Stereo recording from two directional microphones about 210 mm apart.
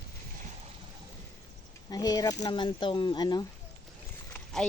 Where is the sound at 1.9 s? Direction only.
15° left (ahead or behind).